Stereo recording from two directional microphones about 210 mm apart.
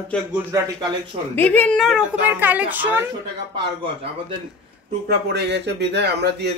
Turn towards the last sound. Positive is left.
turn(degrees=-55)  # may be behind; listen again after turning